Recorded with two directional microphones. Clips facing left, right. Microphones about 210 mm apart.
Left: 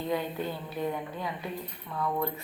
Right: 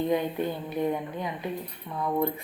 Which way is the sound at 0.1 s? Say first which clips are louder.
Right 4 dB; 20° right (ahead or behind).